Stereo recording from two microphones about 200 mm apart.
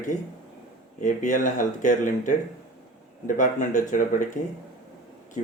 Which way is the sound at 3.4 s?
40° left (ahead or behind).